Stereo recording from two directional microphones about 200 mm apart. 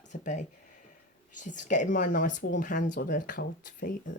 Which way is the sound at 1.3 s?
40° left (ahead or behind).